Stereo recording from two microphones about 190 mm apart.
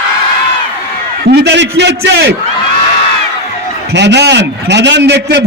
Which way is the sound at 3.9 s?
65° right (ahead or behind).